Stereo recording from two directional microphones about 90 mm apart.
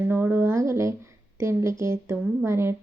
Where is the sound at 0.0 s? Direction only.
25° right (ahead or behind).